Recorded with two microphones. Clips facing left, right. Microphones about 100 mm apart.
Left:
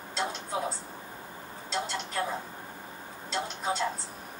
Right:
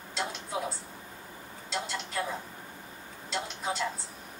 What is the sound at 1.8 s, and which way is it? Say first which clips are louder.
Speech: left 2 dB; 30° left (ahead or behind).